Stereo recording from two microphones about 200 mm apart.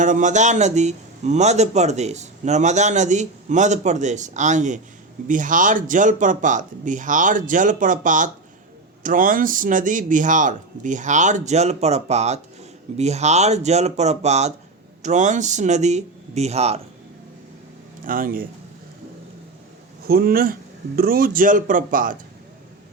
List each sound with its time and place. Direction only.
0.0 s a man's voice: 40° right (ahead or behind)
18.0 s speech: 45° right (ahead or behind)
20.1 s speech: 50° right (ahead or behind)